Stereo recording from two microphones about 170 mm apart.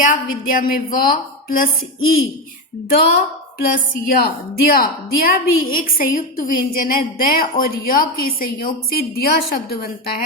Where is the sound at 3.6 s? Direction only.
60° left (ahead or behind).